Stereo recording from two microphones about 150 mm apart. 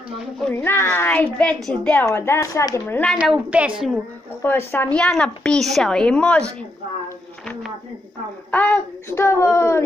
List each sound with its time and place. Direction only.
0.5 s a woman's voice: 15° left (ahead or behind)
3.2 s a woman's voice: 10° right (ahead or behind)
4.4 s a woman's voice: 15° left (ahead or behind)
8.5 s a woman's voice: 10° left (ahead or behind)